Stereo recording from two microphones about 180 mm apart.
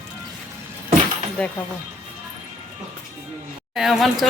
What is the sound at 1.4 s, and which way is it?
Speech, 5° left (ahead or behind).